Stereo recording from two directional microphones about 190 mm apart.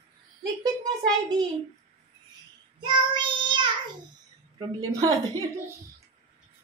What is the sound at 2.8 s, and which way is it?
Child singing, 25° right (ahead or behind).